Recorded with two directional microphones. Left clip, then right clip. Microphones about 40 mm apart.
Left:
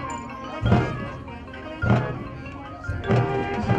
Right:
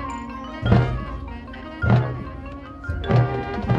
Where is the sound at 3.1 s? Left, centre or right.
Left.